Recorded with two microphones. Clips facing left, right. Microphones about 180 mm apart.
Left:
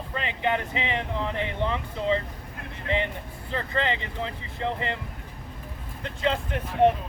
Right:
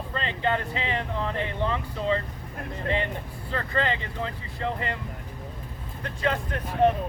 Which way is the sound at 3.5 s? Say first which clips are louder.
Even; 20° left (ahead or behind).